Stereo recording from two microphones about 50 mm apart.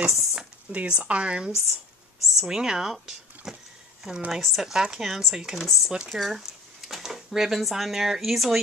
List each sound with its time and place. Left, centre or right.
0.0 s speech: centre
0.7 s speech: right; by 8.5 s centre